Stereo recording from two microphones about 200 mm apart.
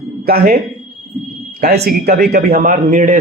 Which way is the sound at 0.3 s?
50° right (ahead or behind).